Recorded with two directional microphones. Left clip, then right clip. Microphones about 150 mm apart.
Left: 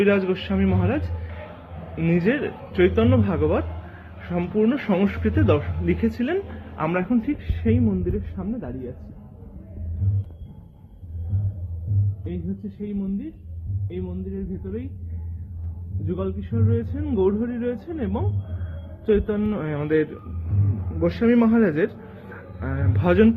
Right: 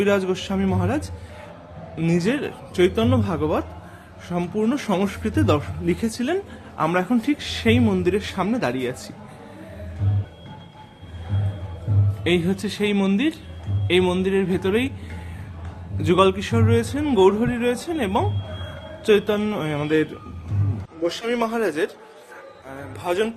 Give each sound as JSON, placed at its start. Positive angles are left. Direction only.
{"t": 0.0, "sound": "speech", "side_deg": -30}
{"t": 12.8, "sound": "speech", "side_deg": -20}
{"t": 16.0, "sound": "speech", "side_deg": -15}
{"t": 22.7, "sound": "a sound", "side_deg": -30}